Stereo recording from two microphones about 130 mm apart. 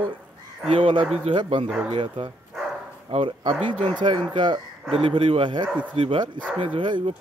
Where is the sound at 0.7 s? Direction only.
45° right (ahead or behind).